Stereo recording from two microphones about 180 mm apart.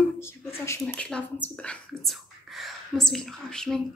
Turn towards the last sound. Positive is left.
turn(degrees=5)  # may be behind; listen again after turning